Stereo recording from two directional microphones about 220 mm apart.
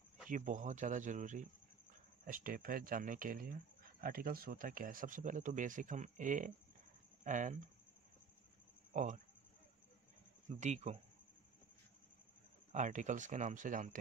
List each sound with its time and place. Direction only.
0.3 s speech: 35° right (ahead or behind)
8.9 s speech: 35° right (ahead or behind)
10.5 s speech: 30° right (ahead or behind)
12.7 s speech: 35° right (ahead or behind)